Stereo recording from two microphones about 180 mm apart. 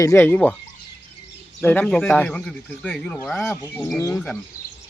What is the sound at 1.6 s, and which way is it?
Speech, 5° left (ahead or behind).